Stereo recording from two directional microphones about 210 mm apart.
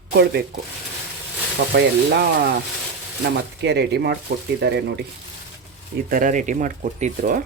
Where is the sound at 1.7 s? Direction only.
50° right (ahead or behind).